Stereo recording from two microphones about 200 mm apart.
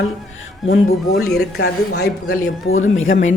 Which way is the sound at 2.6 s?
90° left.